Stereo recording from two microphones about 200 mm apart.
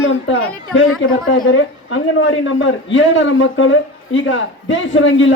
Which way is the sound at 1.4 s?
75° left (ahead or behind).